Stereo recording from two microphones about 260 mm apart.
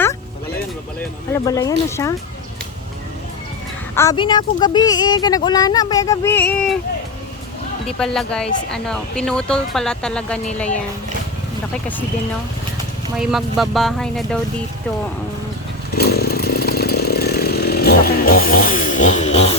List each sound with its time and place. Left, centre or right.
1.3 s speech: centre
3.9 s speech: centre
7.9 s speech: centre
13.1 s speech: centre
16.0 s chainsaw: left